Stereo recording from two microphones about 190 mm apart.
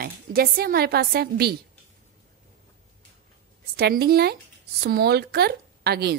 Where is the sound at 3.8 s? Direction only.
55° right (ahead or behind).